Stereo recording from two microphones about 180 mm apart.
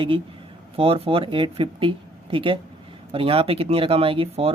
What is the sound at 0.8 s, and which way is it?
Speech, 30° right (ahead or behind).